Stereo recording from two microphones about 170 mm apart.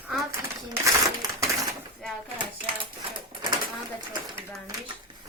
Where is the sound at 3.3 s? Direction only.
25° right (ahead or behind).